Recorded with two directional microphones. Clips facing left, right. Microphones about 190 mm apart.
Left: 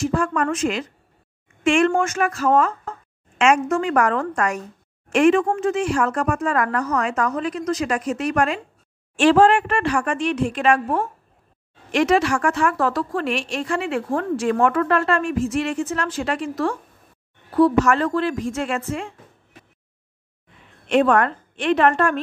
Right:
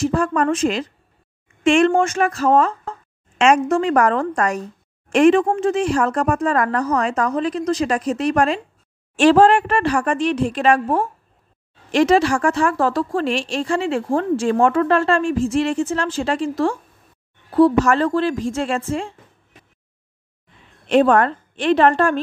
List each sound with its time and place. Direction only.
0.0 s a woman's voice: 35° right (ahead or behind)
20.8 s speech: 30° right (ahead or behind)